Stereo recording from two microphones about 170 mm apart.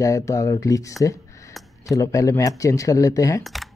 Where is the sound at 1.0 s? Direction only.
20° left (ahead or behind).